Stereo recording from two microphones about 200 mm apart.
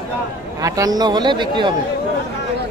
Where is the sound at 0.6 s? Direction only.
15° right (ahead or behind).